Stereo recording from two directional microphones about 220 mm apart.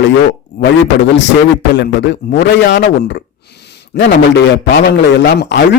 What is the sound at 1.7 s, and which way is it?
A man's voice, 50° left (ahead or behind).